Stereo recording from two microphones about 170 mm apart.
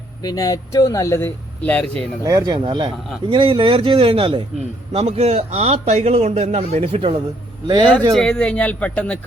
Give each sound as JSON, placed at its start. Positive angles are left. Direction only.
{"t": 0.2, "sound": "speech", "side_deg": 20}
{"t": 2.2, "sound": "a man's voice", "side_deg": -20}
{"t": 8.1, "sound": "speech", "side_deg": 5}